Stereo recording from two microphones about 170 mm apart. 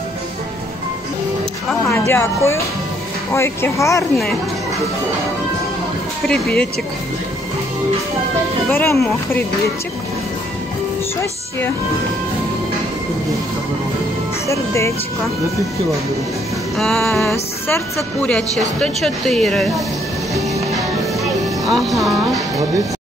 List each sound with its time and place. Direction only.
1.9 s speech: 15° left (ahead or behind)
6.2 s speech: 5° left (ahead or behind)
8.6 s speech: 15° left (ahead or behind)
14.5 s speech: 15° left (ahead or behind)
16.7 s speech: centre (ahead or behind)
17.2 s speech: 15° left (ahead or behind)
21.2 s music: centre (ahead or behind)